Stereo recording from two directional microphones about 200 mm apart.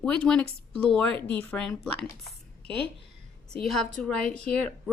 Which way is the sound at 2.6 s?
25° right (ahead or behind).